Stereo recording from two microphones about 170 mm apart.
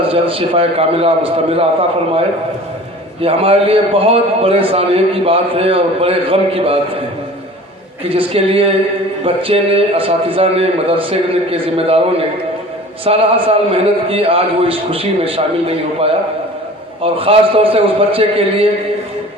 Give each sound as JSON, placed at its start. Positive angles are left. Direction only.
{"t": 0.1, "sound": "a man's voice", "side_deg": -35}
{"t": 3.2, "sound": "a man's voice", "side_deg": -35}
{"t": 8.1, "sound": "a man's voice", "side_deg": -35}